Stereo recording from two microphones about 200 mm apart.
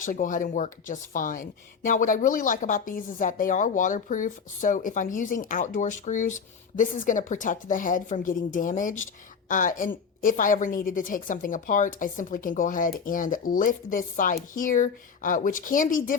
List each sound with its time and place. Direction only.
0.0 s a woman's voice: 40° left (ahead or behind)